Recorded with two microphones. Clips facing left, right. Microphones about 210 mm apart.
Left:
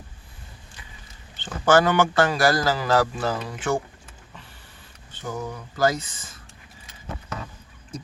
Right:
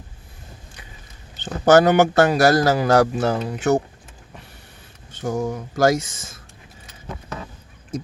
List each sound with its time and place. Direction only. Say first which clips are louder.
1.5 s a man's voice: right 5 dB; 40° right (ahead or behind)
5.2 s speech: right 8 dB; 45° right (ahead or behind)
5.8 s speech: right 5 dB; 85° right